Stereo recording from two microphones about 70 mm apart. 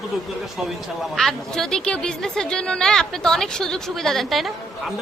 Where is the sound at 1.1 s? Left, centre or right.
Centre.